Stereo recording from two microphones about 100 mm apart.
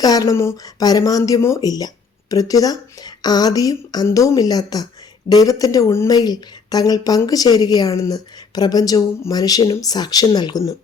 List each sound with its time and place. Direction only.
0.0 s a woman's voice: 40° left (ahead or behind)
6.1 s a woman's voice: 40° left (ahead or behind)